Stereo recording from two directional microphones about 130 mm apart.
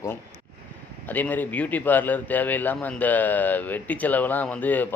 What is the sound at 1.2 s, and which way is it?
A man's voice, 15° left (ahead or behind).